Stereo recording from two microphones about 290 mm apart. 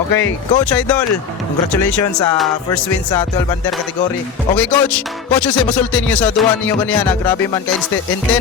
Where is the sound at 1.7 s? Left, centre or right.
Left.